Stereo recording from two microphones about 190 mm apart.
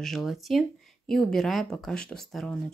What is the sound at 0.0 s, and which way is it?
Speech, centre (ahead or behind).